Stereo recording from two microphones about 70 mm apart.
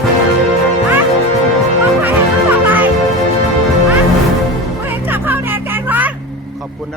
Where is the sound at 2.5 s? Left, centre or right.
Right.